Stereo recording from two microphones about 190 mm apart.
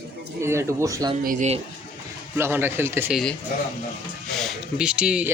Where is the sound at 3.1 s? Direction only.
5° left (ahead or behind).